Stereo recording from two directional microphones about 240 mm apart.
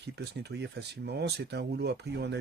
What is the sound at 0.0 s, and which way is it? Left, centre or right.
Speech, right.